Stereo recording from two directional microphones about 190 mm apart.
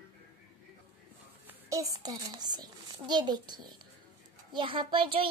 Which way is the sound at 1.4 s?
15° right (ahead or behind).